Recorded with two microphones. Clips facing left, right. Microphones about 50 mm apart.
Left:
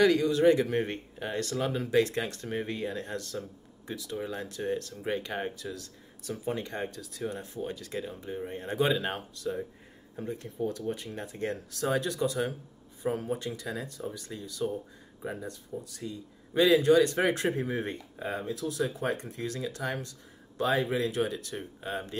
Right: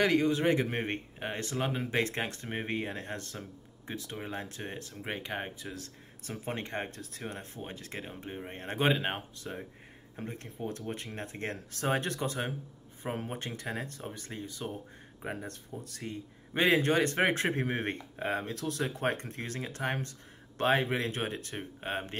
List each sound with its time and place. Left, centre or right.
0.0 s a man's voice: right
5.7 s a man's voice: right
15.2 s a man's voice: right